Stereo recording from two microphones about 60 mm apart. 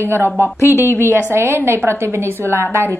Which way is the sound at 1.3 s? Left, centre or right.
Right.